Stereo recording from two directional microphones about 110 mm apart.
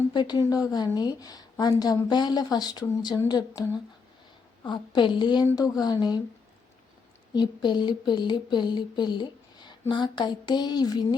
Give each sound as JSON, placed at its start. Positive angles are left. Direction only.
{"t": 0.1, "sound": "speech", "side_deg": 40}
{"t": 7.3, "sound": "speech", "side_deg": 45}